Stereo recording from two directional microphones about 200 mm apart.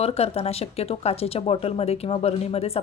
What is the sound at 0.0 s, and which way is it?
Speech, 30° left (ahead or behind).